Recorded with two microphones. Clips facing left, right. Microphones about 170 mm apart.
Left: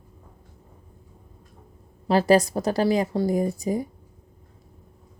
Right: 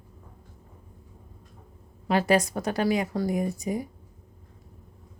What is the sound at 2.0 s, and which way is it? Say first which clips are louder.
A woman's voice: left 4 dB; 35° left (ahead or behind).